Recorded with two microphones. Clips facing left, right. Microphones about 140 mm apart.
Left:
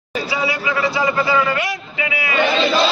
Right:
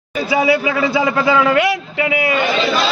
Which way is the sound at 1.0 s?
90° right.